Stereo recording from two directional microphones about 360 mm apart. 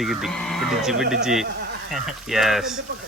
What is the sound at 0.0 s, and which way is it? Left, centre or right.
Speech, centre.